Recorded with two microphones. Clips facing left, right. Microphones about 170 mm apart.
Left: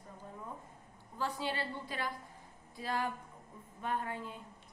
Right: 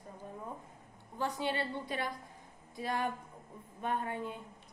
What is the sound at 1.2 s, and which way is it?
A woman's voice, 20° right (ahead or behind).